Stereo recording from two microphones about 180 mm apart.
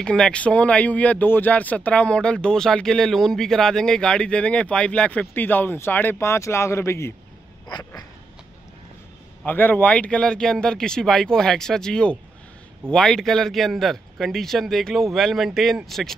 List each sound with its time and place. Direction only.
0.0 s speech: 5° left (ahead or behind)
9.4 s speech: 10° left (ahead or behind)